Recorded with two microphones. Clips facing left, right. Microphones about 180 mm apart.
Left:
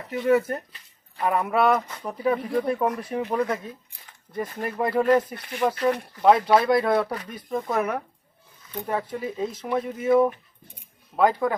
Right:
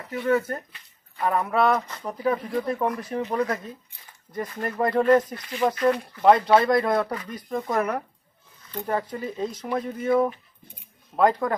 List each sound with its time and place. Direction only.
0.1 s speech: 15° left (ahead or behind)
11.2 s speech: 5° left (ahead or behind)